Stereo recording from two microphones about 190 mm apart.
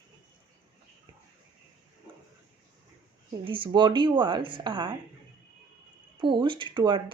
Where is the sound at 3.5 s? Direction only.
25° right (ahead or behind).